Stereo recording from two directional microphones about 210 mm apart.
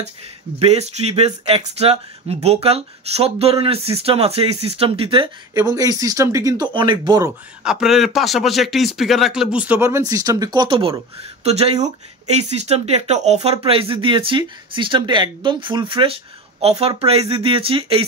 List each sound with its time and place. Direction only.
0.6 s speech: 30° right (ahead or behind)
7.6 s speech: centre (ahead or behind); by 18.0 s 25° right (ahead or behind)